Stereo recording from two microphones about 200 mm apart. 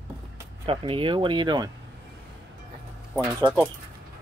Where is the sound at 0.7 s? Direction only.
25° right (ahead or behind).